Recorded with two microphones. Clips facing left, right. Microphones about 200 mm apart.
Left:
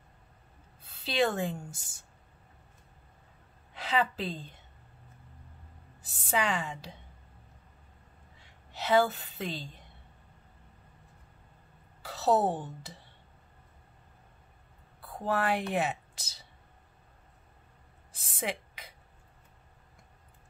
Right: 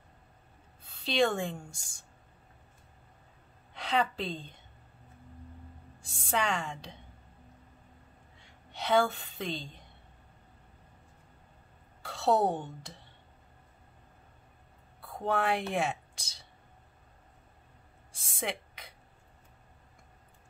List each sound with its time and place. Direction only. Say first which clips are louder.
0.8 s a woman's voice: right 1 dB; 5° left (ahead or behind)
3.7 s a woman's voice: even; 5° left (ahead or behind)
6.3 s a woman's voice: left 1 dB; 5° left (ahead or behind)
8.7 s a woman's voice: left 1 dB; 5° left (ahead or behind)
12.0 s a woman's voice: even; centre (ahead or behind)
15.0 s speech: even; centre (ahead or behind)
18.1 s a sound: left 1 dB; centre (ahead or behind)